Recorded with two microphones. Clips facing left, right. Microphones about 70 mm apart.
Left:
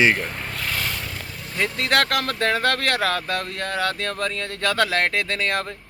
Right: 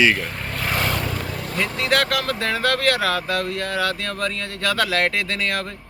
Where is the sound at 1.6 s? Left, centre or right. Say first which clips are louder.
Even; left.